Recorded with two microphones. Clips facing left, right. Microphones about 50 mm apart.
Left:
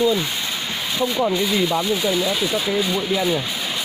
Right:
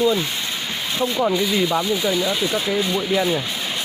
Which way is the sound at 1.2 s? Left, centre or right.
Centre.